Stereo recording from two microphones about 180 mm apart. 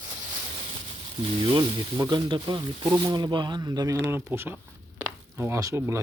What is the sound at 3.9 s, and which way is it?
Speech, 10° right (ahead or behind).